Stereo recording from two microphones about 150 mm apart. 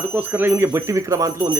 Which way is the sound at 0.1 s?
10° right (ahead or behind).